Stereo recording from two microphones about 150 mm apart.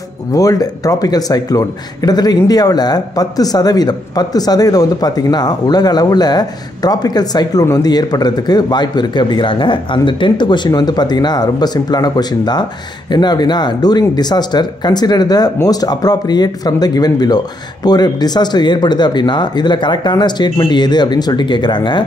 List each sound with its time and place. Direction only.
0.3 s speech: 25° left (ahead or behind)